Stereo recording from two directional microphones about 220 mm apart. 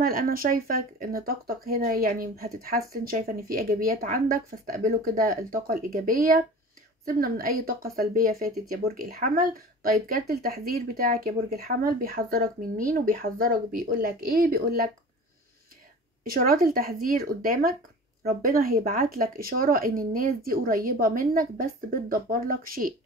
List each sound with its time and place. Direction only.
0.0 s speech: 40° right (ahead or behind)
16.3 s speech: 40° right (ahead or behind)